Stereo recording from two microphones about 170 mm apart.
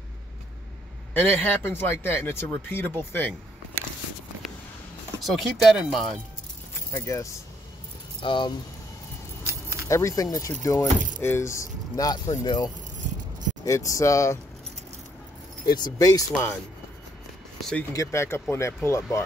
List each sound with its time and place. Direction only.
1.1 s speech: 10° left (ahead or behind)
5.2 s speech: centre (ahead or behind)
6.9 s speech: 20° left (ahead or behind)
9.5 s keys jangling: 15° right (ahead or behind)
9.8 s speech: 20° left (ahead or behind)
15.6 s speech: 25° left (ahead or behind)
17.6 s speech: 5° left (ahead or behind)
17.9 s speech: 15° left (ahead or behind)